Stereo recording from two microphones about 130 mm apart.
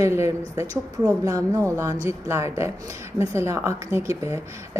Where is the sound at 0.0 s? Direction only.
20° right (ahead or behind).